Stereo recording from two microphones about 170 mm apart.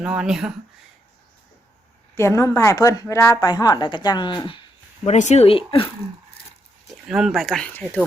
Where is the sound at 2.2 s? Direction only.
15° left (ahead or behind).